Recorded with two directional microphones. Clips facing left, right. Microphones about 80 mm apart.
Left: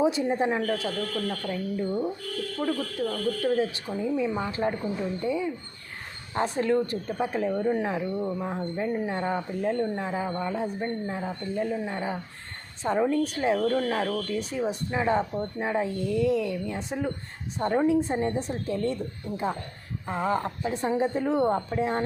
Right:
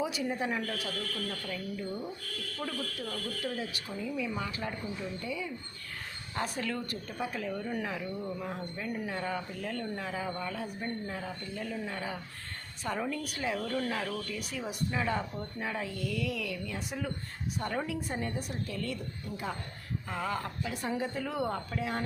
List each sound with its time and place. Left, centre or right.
0.0 s speech: left
14.1 s speech: left
14.3 s speech: left